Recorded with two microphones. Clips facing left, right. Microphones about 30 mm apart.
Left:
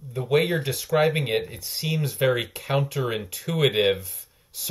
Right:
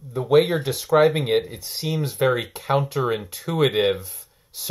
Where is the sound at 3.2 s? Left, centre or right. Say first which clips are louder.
Right 2 dB; right.